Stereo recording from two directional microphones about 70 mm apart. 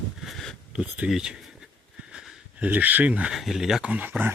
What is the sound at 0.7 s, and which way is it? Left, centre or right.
Speech, centre.